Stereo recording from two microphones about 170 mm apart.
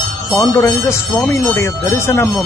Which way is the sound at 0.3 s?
20° left (ahead or behind).